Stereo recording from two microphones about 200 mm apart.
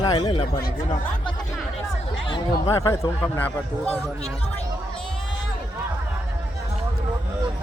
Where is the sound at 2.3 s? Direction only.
15° left (ahead or behind).